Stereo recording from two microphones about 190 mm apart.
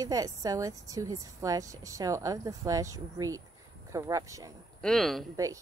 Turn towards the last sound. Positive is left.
turn(degrees=-15)  # may be behind; listen again after turning